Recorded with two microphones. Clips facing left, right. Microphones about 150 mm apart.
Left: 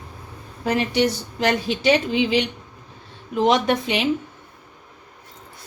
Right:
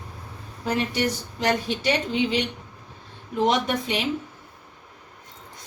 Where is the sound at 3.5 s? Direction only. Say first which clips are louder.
Left 4 dB; 85° left.